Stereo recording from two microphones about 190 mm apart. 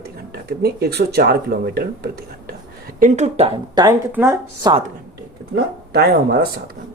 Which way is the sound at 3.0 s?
40° right (ahead or behind).